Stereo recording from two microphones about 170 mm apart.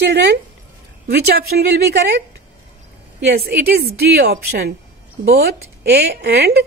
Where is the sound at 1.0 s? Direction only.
65° right (ahead or behind).